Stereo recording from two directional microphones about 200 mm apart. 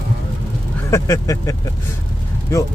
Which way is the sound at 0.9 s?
15° left (ahead or behind).